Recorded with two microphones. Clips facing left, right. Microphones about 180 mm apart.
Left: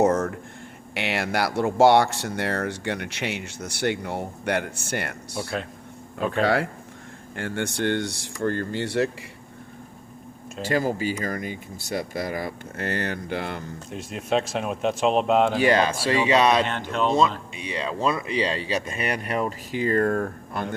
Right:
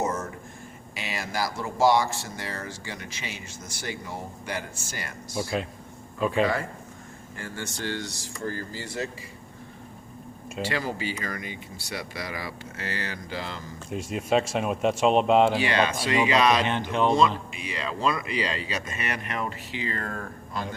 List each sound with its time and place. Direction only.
0.0 s a sound: 60° left (ahead or behind)
0.9 s speech: 70° left (ahead or behind)
5.4 s speech: centre (ahead or behind)
6.4 s speech: 75° left (ahead or behind)
10.6 s speech: 45° left (ahead or behind)
13.9 s speech: centre (ahead or behind)
15.5 s speech: 45° left (ahead or behind)
16.0 s speech: 30° left (ahead or behind)
16.6 s speech: 10° right (ahead or behind)
18.0 s speech: 30° left (ahead or behind); by 20.7 s 60° left (ahead or behind)